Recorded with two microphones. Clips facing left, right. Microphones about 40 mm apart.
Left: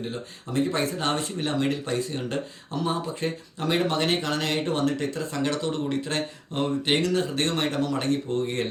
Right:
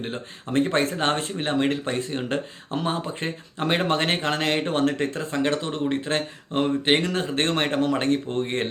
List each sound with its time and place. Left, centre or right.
0.0 s speech: right